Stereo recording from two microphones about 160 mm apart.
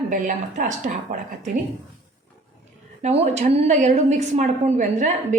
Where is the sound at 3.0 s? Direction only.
45° right (ahead or behind).